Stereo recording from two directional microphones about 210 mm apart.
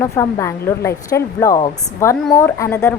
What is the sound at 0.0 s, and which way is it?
Speech, 15° left (ahead or behind).